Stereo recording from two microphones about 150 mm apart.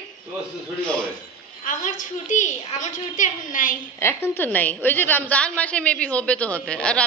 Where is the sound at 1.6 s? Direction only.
60° left (ahead or behind).